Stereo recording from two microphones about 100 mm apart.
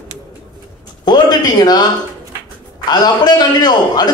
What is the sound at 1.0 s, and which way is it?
A man's voice, 45° left (ahead or behind).